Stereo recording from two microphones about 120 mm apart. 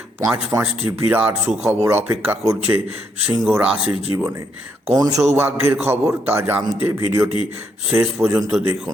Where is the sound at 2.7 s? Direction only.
55° right (ahead or behind).